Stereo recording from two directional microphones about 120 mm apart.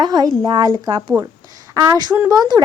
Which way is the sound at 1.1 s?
15° right (ahead or behind).